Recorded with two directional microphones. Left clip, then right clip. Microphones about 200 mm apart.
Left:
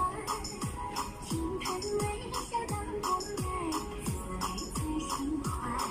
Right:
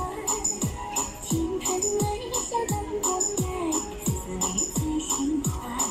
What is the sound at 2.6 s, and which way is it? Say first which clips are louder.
Music: right 5 dB; 20° right (ahead or behind).